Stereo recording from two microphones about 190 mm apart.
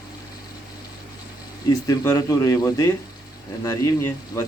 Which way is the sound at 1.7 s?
15° left (ahead or behind).